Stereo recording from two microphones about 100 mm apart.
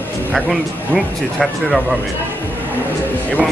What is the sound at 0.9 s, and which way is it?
Speech, centre (ahead or behind).